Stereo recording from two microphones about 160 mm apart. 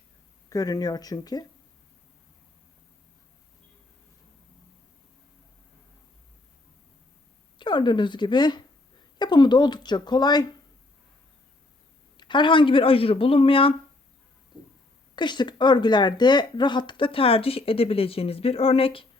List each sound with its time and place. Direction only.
0.5 s speech: 25° left (ahead or behind)
7.6 s speech: 30° left (ahead or behind)
12.1 s speech: 30° left (ahead or behind)
15.1 s speech: 30° left (ahead or behind)